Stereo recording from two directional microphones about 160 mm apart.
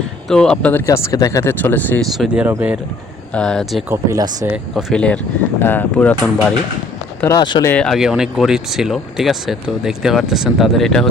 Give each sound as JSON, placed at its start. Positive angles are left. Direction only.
{"t": 0.3, "sound": "speech", "side_deg": 5}
{"t": 0.9, "sound": "speech", "side_deg": 20}
{"t": 2.1, "sound": "speech", "side_deg": -5}
{"t": 3.3, "sound": "speech", "side_deg": 5}
{"t": 3.8, "sound": "speech", "side_deg": -15}
{"t": 4.4, "sound": "speech", "side_deg": -5}
{"t": 7.3, "sound": "speech", "side_deg": 30}
{"t": 7.6, "sound": "speech", "side_deg": 10}